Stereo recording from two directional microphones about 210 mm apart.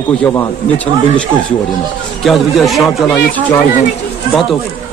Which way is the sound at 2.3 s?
Centre (ahead or behind).